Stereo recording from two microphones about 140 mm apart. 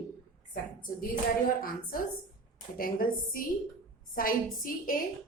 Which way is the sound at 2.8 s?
90° left.